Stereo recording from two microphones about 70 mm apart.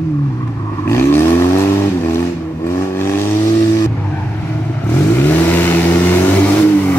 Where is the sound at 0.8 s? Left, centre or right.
Left.